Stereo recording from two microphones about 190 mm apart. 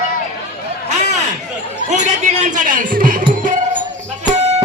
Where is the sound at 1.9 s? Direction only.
40° right (ahead or behind).